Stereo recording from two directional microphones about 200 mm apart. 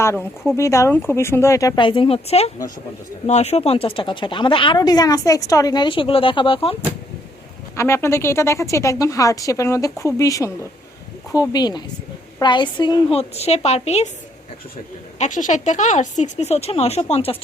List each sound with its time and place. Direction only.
0.0 s a woman's voice: 15° left (ahead or behind)
7.8 s a woman's voice: 15° left (ahead or behind); by 14.1 s 30° left (ahead or behind)
15.2 s speech: 40° left (ahead or behind)